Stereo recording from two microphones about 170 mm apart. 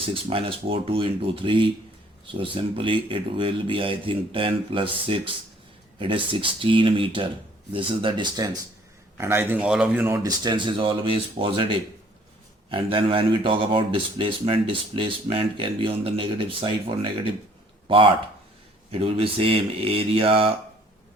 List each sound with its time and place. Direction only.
0.1 s speech: 35° right (ahead or behind)
9.1 s speech: 15° right (ahead or behind)
10.4 s speech: 25° right (ahead or behind)